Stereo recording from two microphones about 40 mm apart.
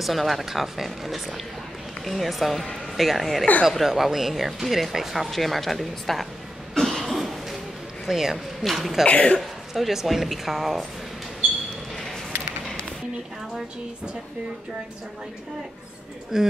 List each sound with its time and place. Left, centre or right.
0.0 s speech: centre
5.3 s speech: centre
6.7 s cough: centre
8.1 s speech: centre
9.0 s cough: left
9.4 s speech: centre
16.3 s speech: centre